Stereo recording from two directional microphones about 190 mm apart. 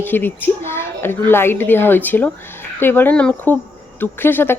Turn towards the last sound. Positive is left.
turn(degrees=10)  # may be behind; listen again after turning